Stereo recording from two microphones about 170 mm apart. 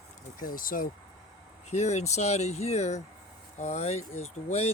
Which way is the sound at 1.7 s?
40° left (ahead or behind).